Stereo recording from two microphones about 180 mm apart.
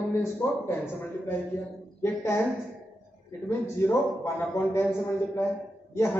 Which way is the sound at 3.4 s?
15° left (ahead or behind).